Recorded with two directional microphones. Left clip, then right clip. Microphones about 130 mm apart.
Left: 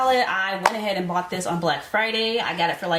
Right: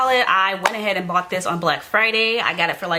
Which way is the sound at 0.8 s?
25° right (ahead or behind).